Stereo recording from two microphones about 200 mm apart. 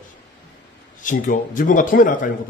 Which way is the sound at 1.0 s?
40° left (ahead or behind).